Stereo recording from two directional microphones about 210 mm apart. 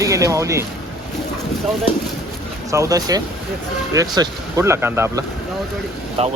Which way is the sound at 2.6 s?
15° right (ahead or behind).